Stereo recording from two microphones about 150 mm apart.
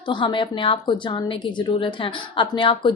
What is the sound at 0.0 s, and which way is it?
A woman's voice, 30° left (ahead or behind).